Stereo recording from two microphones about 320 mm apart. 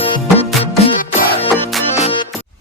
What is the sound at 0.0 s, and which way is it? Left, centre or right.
Music, centre.